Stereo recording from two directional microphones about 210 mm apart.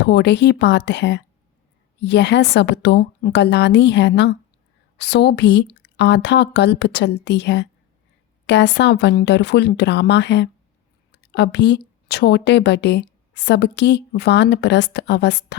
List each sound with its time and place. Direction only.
0.0 s a woman's voice: 55° left (ahead or behind)